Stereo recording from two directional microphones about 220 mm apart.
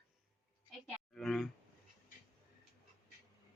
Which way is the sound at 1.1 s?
Centre (ahead or behind).